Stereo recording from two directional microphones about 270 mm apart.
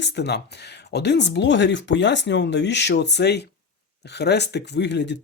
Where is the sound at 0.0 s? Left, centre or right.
Left.